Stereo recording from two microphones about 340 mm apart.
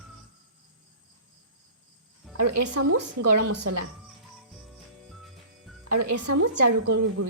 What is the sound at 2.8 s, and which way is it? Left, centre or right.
Speech, right.